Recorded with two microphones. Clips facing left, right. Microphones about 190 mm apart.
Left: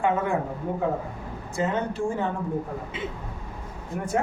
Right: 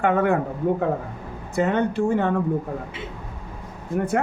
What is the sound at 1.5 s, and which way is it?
Speech, 65° right (ahead or behind).